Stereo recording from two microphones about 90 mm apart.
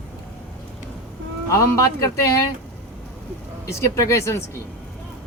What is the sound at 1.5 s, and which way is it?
Speech, 35° left (ahead or behind).